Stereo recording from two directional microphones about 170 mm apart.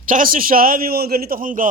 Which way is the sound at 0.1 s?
55° right (ahead or behind).